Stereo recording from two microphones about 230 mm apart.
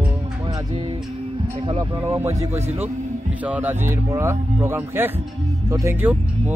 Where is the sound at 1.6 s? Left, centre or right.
Right.